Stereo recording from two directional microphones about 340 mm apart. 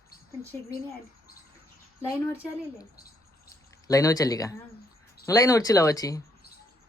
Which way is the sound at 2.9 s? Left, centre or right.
Left.